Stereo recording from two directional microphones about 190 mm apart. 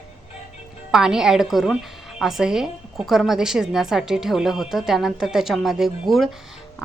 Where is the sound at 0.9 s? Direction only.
5° right (ahead or behind).